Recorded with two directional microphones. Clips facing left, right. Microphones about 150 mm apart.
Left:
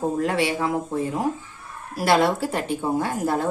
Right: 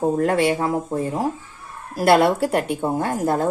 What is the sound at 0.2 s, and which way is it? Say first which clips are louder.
Speech: right 4 dB; 50° right (ahead or behind).